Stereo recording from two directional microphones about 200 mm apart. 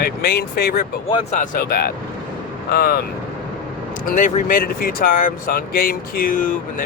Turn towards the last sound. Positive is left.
turn(degrees=40)  # may be behind; listen again after turning